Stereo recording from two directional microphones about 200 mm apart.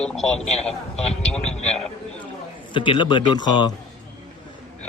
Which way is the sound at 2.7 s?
25° left (ahead or behind).